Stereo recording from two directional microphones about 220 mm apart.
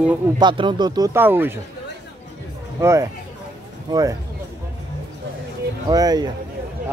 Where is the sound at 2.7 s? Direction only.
15° right (ahead or behind).